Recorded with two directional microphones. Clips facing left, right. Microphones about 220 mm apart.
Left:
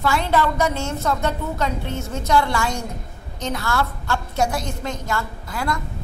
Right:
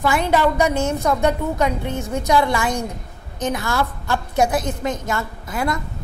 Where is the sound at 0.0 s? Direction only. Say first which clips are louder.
Right 2 dB; 15° right (ahead or behind).